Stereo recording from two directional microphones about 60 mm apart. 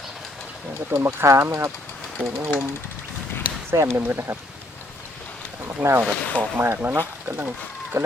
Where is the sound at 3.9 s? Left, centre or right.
Right.